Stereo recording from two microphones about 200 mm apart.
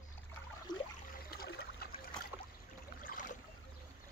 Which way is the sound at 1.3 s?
50° left (ahead or behind).